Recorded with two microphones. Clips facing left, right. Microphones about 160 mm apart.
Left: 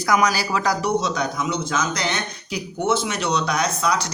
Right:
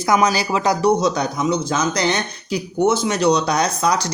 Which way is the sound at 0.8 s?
35° right (ahead or behind).